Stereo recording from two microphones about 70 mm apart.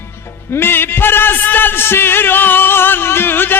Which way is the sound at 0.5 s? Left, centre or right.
Left.